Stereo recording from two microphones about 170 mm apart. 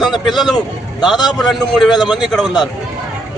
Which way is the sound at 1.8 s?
25° left (ahead or behind).